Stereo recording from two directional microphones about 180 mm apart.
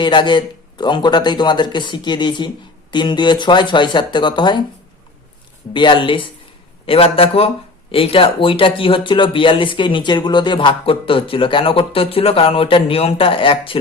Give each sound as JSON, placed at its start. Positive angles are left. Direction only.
{"t": 0.0, "sound": "speech", "side_deg": 25}
{"t": 5.7, "sound": "speech", "side_deg": 25}